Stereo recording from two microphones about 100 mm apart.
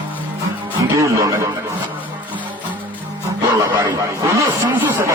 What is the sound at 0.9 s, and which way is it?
Speech, 30° right (ahead or behind).